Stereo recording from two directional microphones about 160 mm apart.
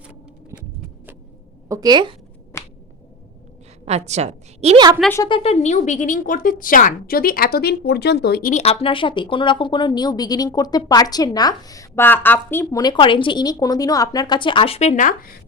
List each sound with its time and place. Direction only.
1.6 s a woman's voice: 20° right (ahead or behind)
2.5 s finger snapping: 20° left (ahead or behind)
3.8 s a woman's voice: 45° right (ahead or behind)
5.2 s speech: 35° left (ahead or behind); by 8.5 s 80° left
8.5 s speech: 40° left (ahead or behind); by 12.8 s 15° left (ahead or behind)
12.8 s a woman's voice: 30° left (ahead or behind); by 15.4 s 60° left (ahead or behind)